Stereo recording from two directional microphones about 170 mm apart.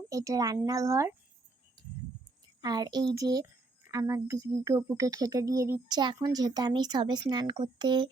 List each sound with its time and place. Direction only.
0.1 s speech: 20° right (ahead or behind)
2.6 s speech: 25° right (ahead or behind)